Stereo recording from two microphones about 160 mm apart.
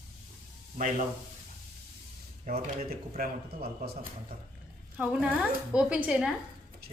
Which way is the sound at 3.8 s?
80° right.